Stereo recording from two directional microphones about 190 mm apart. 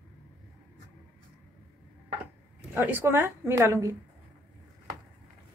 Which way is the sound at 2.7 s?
10° right (ahead or behind).